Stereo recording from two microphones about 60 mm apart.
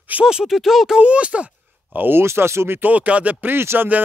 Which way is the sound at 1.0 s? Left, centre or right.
Centre.